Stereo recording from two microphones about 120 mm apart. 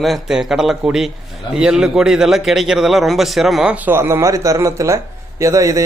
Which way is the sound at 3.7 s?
20° right (ahead or behind).